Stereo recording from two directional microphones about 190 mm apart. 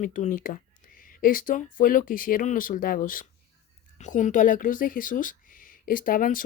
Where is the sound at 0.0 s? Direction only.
40° left (ahead or behind).